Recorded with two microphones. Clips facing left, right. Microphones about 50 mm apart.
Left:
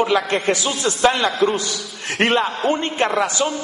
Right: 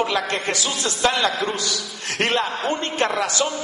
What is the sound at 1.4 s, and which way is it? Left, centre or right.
A man's voice, left.